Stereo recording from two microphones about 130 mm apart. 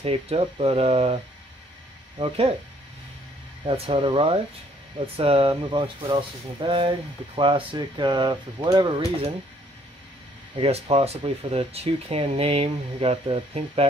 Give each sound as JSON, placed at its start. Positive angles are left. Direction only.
{"t": 0.0, "sound": "speech", "side_deg": -50}
{"t": 3.6, "sound": "speech", "side_deg": -50}
{"t": 5.5, "sound": "speech", "side_deg": -35}
{"t": 10.6, "sound": "speech", "side_deg": -50}